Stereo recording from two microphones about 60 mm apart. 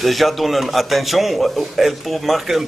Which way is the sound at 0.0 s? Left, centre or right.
Centre.